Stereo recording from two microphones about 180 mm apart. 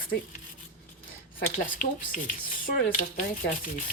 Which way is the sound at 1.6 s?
50° left (ahead or behind).